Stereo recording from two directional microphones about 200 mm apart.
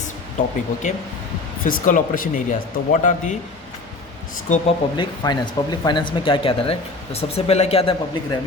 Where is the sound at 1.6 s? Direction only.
40° left (ahead or behind).